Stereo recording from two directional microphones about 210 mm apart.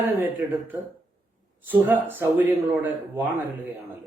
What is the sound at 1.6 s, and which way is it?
A man's voice, 10° right (ahead or behind).